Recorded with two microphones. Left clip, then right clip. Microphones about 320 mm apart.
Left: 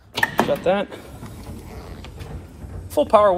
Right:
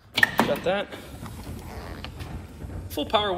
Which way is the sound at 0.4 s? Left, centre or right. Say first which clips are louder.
Left 5 dB; centre.